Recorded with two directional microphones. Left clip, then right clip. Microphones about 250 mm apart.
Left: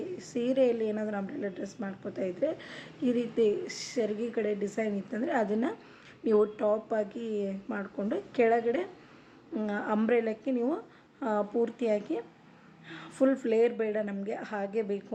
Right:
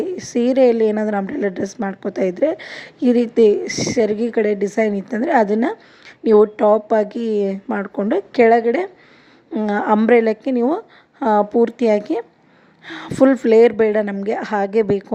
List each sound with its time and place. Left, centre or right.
0.2 s a woman's voice: right